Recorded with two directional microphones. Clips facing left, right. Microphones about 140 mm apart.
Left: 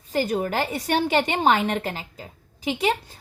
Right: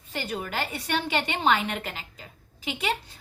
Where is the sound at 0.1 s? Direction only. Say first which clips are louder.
Left 8 dB; 45° left (ahead or behind).